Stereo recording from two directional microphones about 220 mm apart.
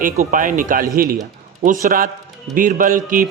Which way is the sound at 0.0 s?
35° right (ahead or behind).